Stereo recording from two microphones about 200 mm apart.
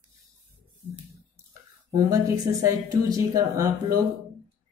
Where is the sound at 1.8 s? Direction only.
15° right (ahead or behind).